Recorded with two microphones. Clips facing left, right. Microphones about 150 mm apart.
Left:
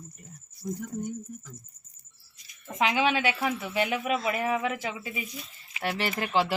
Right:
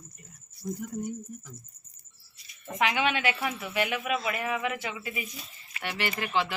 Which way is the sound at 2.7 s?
25° left (ahead or behind).